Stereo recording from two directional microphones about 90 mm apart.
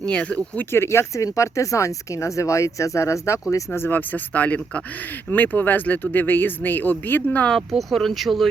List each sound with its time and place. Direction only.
0.0 s speech: 15° left (ahead or behind)
0.7 s speech: 30° left (ahead or behind)
7.5 s speech: centre (ahead or behind)